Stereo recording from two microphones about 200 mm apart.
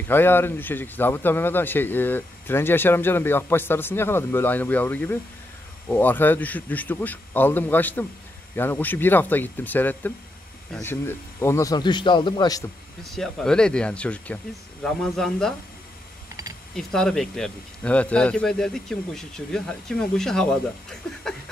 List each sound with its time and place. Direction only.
0.1 s a man's voice: 10° left (ahead or behind)
13.0 s speech: centre (ahead or behind)
16.7 s speech: 5° left (ahead or behind)